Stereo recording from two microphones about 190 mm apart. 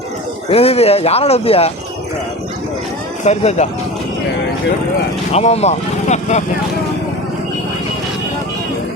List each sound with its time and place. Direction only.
0.5 s speech: 30° left (ahead or behind)
3.2 s speech: 35° left (ahead or behind)
5.3 s speech: 35° left (ahead or behind)